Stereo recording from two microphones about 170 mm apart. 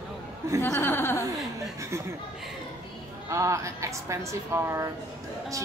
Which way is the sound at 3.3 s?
15° right (ahead or behind).